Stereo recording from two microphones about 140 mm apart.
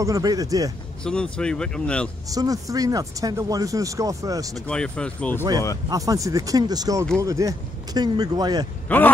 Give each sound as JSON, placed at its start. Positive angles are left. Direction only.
{"t": 0.0, "sound": "speech", "side_deg": -25}
{"t": 1.0, "sound": "speech", "side_deg": 5}
{"t": 2.2, "sound": "speech", "side_deg": -25}
{"t": 4.6, "sound": "speech", "side_deg": 5}
{"t": 5.9, "sound": "speech", "side_deg": -25}
{"t": 8.8, "sound": "speech", "side_deg": 10}